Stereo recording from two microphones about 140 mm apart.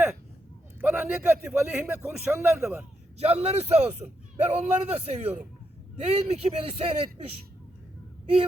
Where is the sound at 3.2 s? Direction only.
50° right (ahead or behind).